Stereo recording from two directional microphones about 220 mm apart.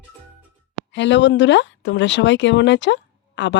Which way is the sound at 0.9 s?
55° left (ahead or behind).